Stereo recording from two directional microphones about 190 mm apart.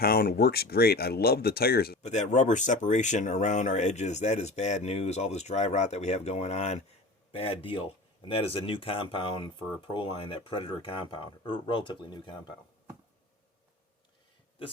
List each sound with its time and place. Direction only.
0.0 s speech: 55° left (ahead or behind)
2.0 s speech: 35° left (ahead or behind)